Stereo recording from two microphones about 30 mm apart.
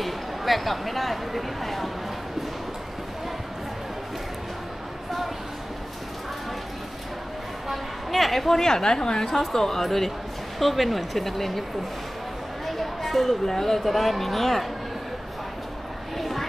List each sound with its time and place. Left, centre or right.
0.0 s speech: centre
7.6 s a sound: centre
8.5 s speech: centre
12.6 s a sound: centre
13.5 s speech: centre
16.2 s vehicle: centre